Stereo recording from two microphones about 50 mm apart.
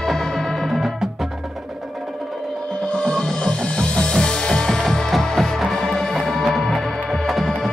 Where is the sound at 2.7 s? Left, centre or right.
Left.